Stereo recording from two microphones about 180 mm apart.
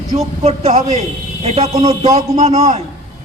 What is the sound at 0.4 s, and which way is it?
A man's voice, 35° right (ahead or behind).